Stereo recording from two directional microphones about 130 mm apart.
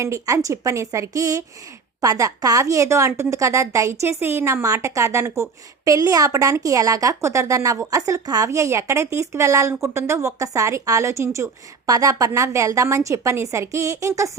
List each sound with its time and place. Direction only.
0.0 s a woman's voice: 20° right (ahead or behind)